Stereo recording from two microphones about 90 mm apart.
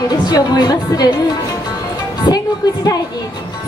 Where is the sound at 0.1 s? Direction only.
50° left (ahead or behind).